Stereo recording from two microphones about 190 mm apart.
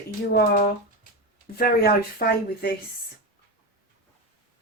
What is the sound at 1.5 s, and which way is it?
Speech, 50° left (ahead or behind).